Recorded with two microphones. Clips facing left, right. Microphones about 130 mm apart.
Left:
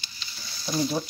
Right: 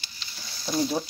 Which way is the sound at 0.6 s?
30° right (ahead or behind).